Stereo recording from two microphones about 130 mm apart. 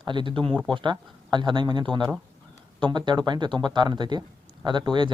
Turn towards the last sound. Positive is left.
turn(degrees=-35)  # may be behind; listen again after turning